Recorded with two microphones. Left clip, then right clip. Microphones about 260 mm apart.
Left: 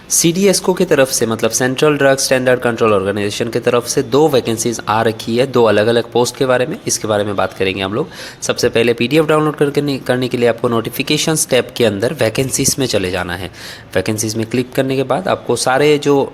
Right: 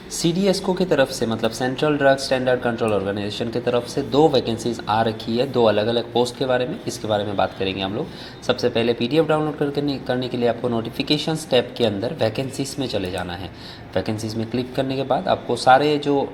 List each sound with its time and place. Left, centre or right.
0.3 s speech: left